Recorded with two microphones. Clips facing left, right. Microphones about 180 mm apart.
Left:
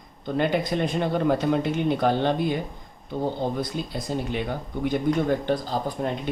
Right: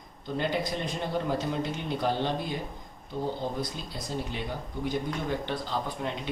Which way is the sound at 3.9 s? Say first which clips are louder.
Left 5 dB; 60° left (ahead or behind).